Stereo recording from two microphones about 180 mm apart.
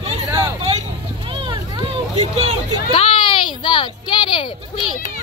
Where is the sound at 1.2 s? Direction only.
30° right (ahead or behind).